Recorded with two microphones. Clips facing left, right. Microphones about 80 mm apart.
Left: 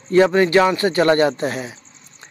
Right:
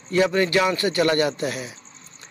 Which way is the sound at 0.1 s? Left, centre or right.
Left.